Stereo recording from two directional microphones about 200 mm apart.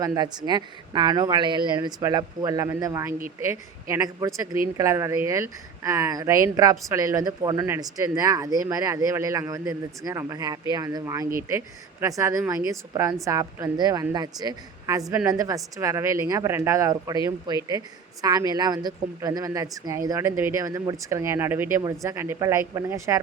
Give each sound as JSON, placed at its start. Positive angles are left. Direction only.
{"t": 0.0, "sound": "a woman's voice", "side_deg": -20}